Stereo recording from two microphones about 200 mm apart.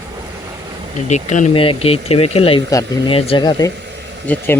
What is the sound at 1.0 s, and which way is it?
Speech, 35° left (ahead or behind).